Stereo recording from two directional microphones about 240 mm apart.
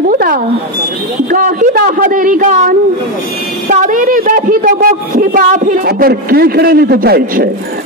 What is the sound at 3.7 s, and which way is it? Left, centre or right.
A man's voice, right.